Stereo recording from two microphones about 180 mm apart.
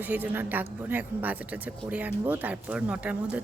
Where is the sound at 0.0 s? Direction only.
10° right (ahead or behind).